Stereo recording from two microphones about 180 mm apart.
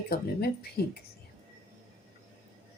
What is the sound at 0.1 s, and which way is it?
Speech, 60° left (ahead or behind).